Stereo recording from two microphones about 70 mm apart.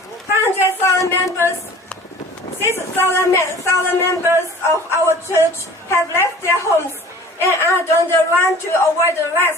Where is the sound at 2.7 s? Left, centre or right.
Left.